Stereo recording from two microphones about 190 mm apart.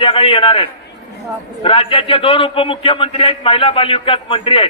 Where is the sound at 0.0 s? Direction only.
30° left (ahead or behind).